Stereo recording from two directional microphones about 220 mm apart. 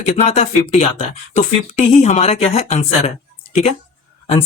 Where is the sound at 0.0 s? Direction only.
30° left (ahead or behind).